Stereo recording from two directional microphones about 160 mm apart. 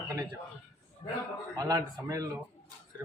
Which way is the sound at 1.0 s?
40° left (ahead or behind).